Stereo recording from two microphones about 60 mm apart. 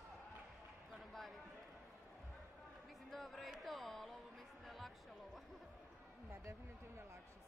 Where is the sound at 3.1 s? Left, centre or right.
Centre.